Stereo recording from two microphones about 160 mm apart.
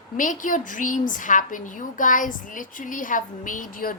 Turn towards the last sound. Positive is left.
turn(degrees=60)  # may be behind; listen again after turning